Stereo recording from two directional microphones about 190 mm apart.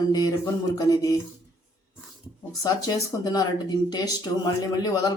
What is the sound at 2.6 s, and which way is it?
Speech, 20° left (ahead or behind).